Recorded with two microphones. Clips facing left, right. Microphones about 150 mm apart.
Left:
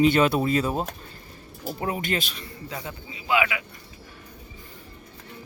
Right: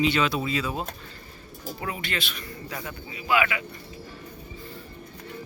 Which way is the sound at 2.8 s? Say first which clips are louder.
Even; 20° left (ahead or behind).